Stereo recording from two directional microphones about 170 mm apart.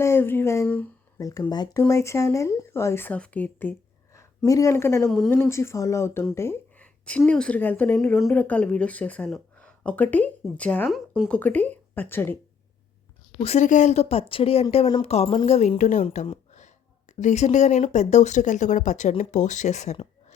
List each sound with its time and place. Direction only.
0.0 s speech: 15° left (ahead or behind)
5.0 s speech: centre (ahead or behind)
5.3 s a woman's voice: 15° left (ahead or behind)
7.9 s speech: centre (ahead or behind)
11.3 s speech: 10° left (ahead or behind)
13.4 s a woman's voice: 40° left (ahead or behind)